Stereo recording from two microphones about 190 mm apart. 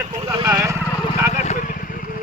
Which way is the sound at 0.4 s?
15° right (ahead or behind).